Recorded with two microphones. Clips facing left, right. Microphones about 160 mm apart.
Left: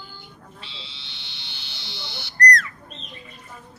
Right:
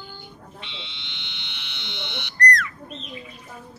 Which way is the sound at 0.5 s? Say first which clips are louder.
Right 3 dB; 35° left (ahead or behind).